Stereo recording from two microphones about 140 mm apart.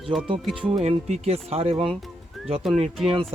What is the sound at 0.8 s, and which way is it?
Speech, 50° right (ahead or behind).